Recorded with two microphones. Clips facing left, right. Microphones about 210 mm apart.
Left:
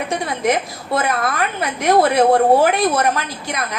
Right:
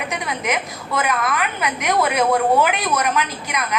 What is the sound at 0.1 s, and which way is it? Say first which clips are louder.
A woman's voice: left 7 dB; 30° left (ahead or behind).